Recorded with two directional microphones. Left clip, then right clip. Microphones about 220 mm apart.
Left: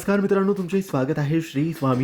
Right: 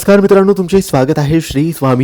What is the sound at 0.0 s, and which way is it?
Speech, 35° right (ahead or behind).